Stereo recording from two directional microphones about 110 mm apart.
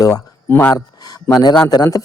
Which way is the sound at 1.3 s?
35° left (ahead or behind).